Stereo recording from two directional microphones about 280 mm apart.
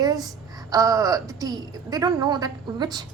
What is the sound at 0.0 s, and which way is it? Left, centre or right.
A woman's voice, centre.